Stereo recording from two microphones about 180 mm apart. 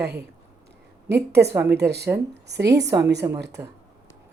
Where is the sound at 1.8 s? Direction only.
15° right (ahead or behind).